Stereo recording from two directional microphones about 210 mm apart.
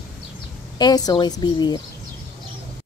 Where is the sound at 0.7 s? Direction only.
20° left (ahead or behind).